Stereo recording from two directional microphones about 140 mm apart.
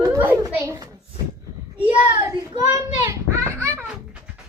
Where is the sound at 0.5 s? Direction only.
15° right (ahead or behind).